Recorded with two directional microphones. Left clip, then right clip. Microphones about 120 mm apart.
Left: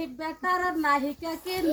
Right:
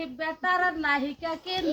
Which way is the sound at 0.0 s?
30° right (ahead or behind).